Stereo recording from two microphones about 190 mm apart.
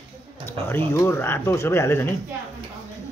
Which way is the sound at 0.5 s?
10° left (ahead or behind).